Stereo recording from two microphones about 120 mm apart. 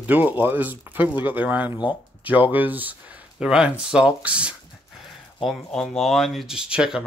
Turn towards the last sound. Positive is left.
turn(degrees=-5)  # may be behind; listen again after turning